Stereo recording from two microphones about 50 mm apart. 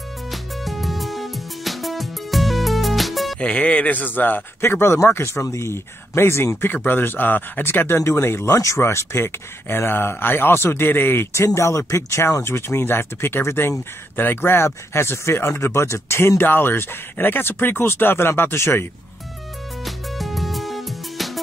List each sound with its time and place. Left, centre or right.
0.3 s music: centre
3.3 s speech: left
4.6 s speech: left
6.6 s speech: left
8.0 s speech: left
11.3 s speech: left
14.1 s speech: left
16.4 s speech: left
19.8 s music: centre